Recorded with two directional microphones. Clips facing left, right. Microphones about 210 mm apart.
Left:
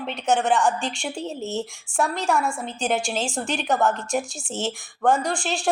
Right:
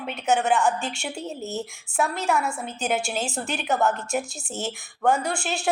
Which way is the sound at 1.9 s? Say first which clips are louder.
Left 1 dB; 5° right (ahead or behind).